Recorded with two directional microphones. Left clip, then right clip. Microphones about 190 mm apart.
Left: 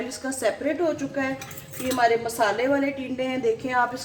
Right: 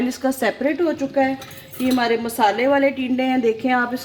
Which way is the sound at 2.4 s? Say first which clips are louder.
Right 9 dB; 50° right (ahead or behind).